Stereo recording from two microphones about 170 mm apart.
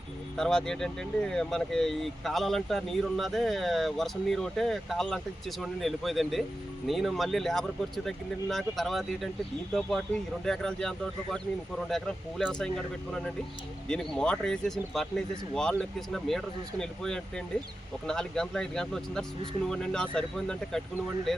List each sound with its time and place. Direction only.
0.3 s speech: 5° left (ahead or behind)
10.4 s speech: 5° left (ahead or behind)